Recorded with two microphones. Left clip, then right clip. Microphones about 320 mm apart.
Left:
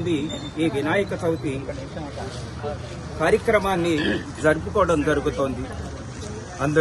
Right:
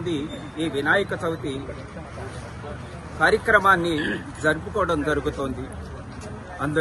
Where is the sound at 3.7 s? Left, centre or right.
Centre.